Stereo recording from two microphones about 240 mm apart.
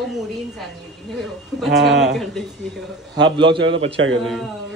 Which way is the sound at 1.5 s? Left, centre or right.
Centre.